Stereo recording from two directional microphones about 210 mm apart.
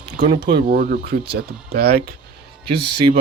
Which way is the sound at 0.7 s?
45° right (ahead or behind).